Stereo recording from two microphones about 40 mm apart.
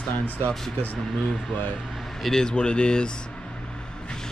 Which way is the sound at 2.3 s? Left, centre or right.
Left.